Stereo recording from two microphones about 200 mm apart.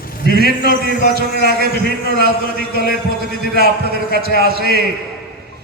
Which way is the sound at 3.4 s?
50° right (ahead or behind).